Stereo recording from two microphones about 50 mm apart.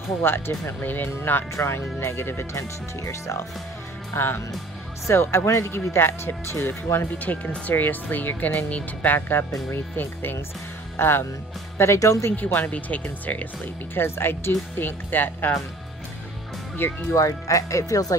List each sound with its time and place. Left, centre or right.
0.2 s speech: left
2.0 s speech: left
4.1 s speech: left
7.2 s speech: left
9.3 s speech: left
11.0 s speech: left
11.8 s speech: left
12.4 s speech: left
13.9 s speech: left
14.8 s speech: left
17.1 s speech: left